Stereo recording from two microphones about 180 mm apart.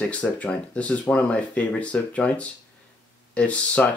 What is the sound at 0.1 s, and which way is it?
Speech, 10° left (ahead or behind).